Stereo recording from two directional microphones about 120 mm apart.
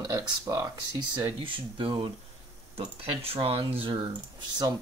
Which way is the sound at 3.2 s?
50° right (ahead or behind).